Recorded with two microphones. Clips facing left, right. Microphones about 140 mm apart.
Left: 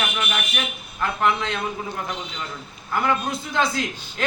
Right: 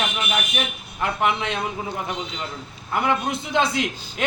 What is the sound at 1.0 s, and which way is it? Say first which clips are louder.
Speech: even; 20° right (ahead or behind).